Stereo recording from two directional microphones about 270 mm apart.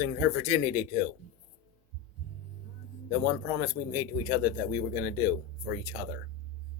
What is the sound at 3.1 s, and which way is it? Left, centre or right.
A man's voice, centre.